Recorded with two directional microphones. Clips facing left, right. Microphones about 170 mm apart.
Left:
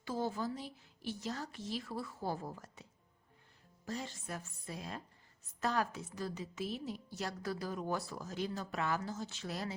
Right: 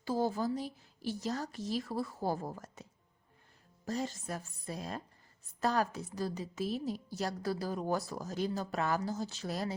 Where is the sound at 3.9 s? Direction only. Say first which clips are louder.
Right 5 dB; 40° right (ahead or behind).